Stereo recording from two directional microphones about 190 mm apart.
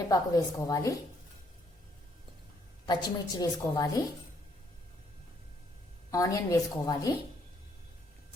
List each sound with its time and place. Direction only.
0.1 s a woman's voice: 20° left (ahead or behind)
2.8 s a woman's voice: 20° left (ahead or behind)
6.1 s a woman's voice: 15° left (ahead or behind)